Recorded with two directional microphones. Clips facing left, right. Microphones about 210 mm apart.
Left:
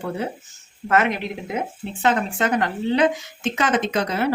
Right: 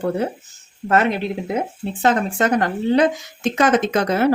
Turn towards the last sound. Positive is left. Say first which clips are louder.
# right 4 dB
turn(degrees=-50)  # may be behind; listen again after turning